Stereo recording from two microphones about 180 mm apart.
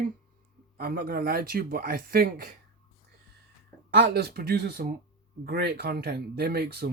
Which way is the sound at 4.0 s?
65° right (ahead or behind).